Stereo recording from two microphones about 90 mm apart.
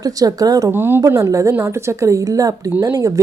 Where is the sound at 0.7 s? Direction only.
25° right (ahead or behind).